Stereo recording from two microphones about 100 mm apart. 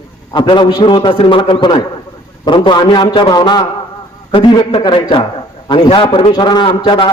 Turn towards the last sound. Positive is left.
turn(degrees=55)  # may be behind; listen again after turning